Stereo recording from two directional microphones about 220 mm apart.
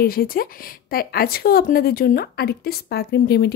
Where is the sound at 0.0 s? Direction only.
40° left (ahead or behind).